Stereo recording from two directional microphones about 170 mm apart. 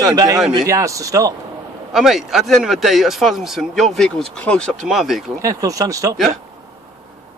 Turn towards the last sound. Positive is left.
turn(degrees=-20)  # may be behind; listen again after turning